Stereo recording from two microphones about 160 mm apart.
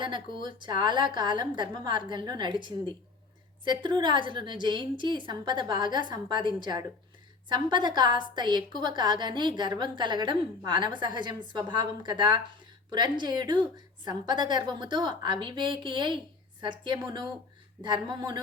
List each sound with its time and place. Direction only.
0.0 s a woman's voice: 30° right (ahead or behind)
3.6 s a woman's voice: 30° right (ahead or behind)